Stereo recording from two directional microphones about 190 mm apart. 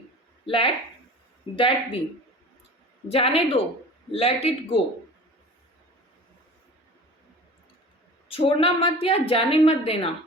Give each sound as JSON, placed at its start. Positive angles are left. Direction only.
{"t": 0.4, "sound": "a woman's voice", "side_deg": 30}
{"t": 3.1, "sound": "a man's voice", "side_deg": 30}
{"t": 8.3, "sound": "a woman's voice", "side_deg": 30}